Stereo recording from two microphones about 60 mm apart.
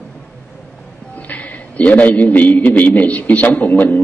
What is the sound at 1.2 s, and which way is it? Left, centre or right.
A man's voice, left.